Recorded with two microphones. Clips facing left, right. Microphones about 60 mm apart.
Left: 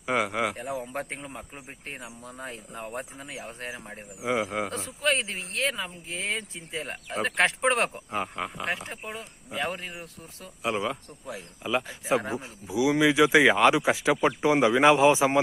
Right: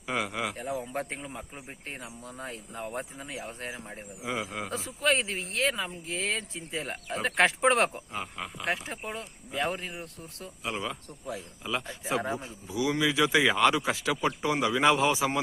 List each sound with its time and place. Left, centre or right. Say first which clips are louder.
0.0 s a sound: left 5 dB; centre
0.5 s speech: left 1 dB; centre
4.2 s speech: left 6 dB; centre
4.7 s speech: even; centre
8.1 s speech: left 5 dB; left
8.6 s speech: even; centre
14.1 s speech: left 5 dB; left